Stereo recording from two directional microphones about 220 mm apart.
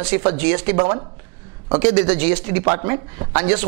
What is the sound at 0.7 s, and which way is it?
Speech, 25° right (ahead or behind).